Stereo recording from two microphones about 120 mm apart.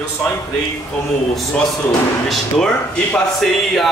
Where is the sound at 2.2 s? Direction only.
5° left (ahead or behind).